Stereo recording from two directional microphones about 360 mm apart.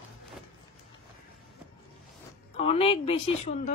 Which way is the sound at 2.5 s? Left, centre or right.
Centre.